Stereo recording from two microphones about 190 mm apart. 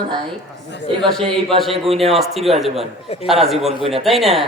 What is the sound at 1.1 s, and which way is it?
A man's voice, 5° left (ahead or behind).